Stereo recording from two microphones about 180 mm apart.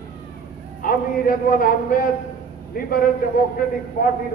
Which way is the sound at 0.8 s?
50° left (ahead or behind).